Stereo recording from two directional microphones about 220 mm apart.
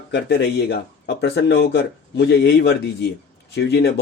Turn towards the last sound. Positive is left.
turn(degrees=50)  # may be behind; listen again after turning